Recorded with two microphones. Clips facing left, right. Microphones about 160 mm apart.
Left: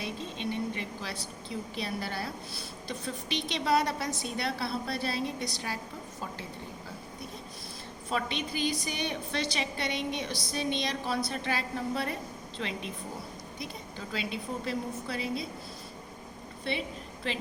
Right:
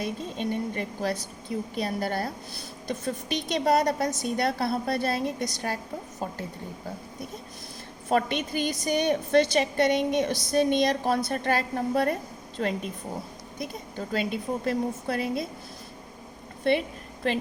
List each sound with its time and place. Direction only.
0.0 s a woman's voice: 45° right (ahead or behind)
8.1 s a woman's voice: 50° right (ahead or behind)
16.7 s a woman's voice: 55° right (ahead or behind)